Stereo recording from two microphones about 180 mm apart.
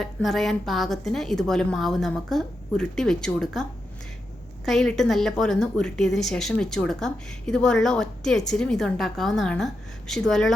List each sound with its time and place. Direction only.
0.0 s a woman's voice: centre (ahead or behind)